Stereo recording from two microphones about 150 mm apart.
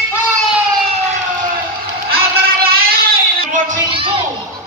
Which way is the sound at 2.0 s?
90° right.